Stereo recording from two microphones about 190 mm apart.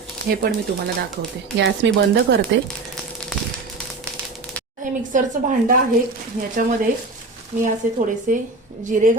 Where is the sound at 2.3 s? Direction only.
65° right (ahead or behind).